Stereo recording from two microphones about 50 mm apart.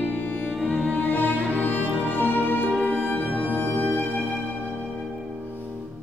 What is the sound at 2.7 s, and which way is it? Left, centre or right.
Music, left.